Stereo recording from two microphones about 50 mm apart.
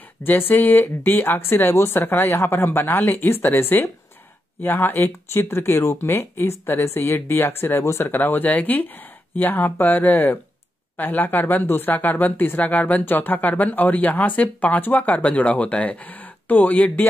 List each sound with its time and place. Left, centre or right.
0.2 s speech: left